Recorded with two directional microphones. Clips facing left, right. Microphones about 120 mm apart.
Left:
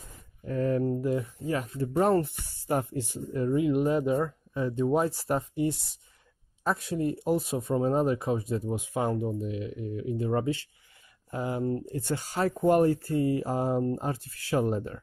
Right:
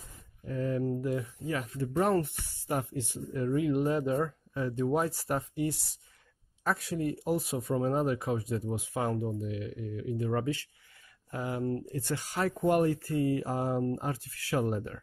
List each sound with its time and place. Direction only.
0.5 s a sound: 60° left (ahead or behind)
0.9 s speech: 25° left (ahead or behind)
3.4 s speech: 20° left (ahead or behind)